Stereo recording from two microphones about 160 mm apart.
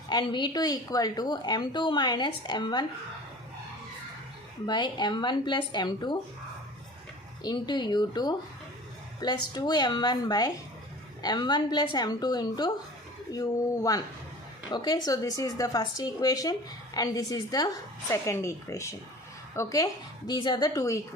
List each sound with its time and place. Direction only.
0.1 s speech: 30° left (ahead or behind)
4.6 s speech: 30° left (ahead or behind)
7.4 s speech: 25° left (ahead or behind)
14.7 s speech: 25° left (ahead or behind)